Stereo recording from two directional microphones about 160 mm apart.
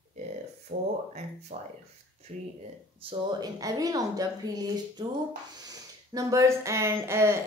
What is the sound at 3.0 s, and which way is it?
A woman's voice, 30° right (ahead or behind).